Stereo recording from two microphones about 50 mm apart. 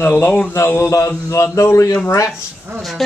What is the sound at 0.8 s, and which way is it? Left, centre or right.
Mantra, left.